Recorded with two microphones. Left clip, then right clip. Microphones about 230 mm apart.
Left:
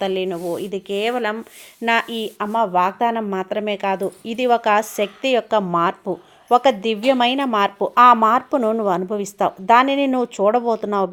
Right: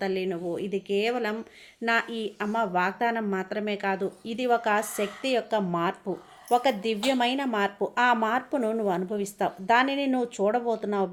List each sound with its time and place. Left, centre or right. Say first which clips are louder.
0.0 s speech: left 7 dB; left